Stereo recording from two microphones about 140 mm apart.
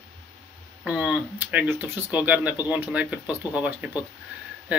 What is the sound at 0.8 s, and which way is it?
Speech, 5° right (ahead or behind).